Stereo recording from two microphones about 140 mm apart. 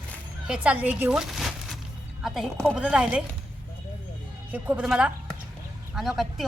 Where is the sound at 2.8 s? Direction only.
10° right (ahead or behind).